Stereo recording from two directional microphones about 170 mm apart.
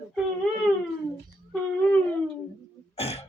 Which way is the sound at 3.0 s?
35° left (ahead or behind).